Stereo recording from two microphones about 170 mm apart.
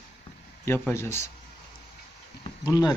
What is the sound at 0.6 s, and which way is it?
Speech, 15° left (ahead or behind).